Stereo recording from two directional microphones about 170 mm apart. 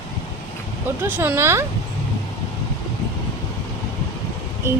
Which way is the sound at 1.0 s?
10° right (ahead or behind).